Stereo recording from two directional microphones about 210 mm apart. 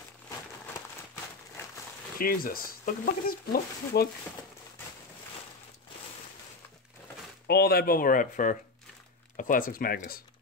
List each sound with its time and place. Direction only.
2.1 s speech: 45° left (ahead or behind)
7.4 s speech: 50° left (ahead or behind)